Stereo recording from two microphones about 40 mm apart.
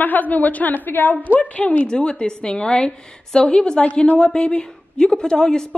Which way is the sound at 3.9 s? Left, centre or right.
Left.